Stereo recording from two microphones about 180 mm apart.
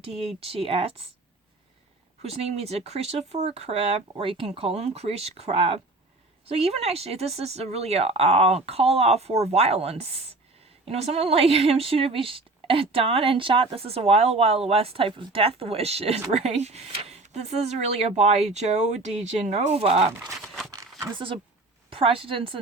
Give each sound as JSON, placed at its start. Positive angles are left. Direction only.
{"t": 0.2, "sound": "speech", "side_deg": -35}
{"t": 2.2, "sound": "speech", "side_deg": -35}
{"t": 21.1, "sound": "a woman's voice", "side_deg": -30}